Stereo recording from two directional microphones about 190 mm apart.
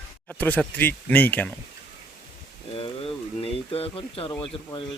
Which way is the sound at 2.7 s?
30° left (ahead or behind).